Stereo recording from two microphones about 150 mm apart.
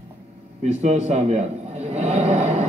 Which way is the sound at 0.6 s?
50° right (ahead or behind).